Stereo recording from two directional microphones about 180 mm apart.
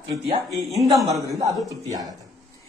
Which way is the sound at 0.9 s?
20° right (ahead or behind).